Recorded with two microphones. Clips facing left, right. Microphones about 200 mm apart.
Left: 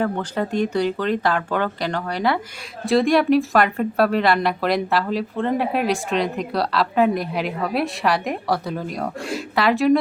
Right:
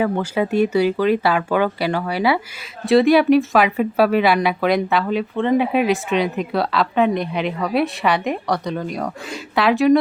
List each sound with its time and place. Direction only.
0.0 s speech: 10° right (ahead or behind)